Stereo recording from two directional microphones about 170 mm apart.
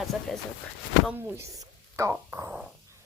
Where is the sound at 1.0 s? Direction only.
15° right (ahead or behind).